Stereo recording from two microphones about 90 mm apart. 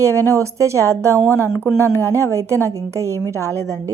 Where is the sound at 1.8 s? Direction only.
30° left (ahead or behind).